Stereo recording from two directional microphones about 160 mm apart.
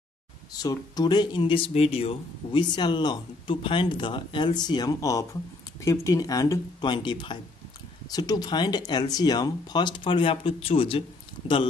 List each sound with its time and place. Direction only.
0.5 s speech: 25° left (ahead or behind)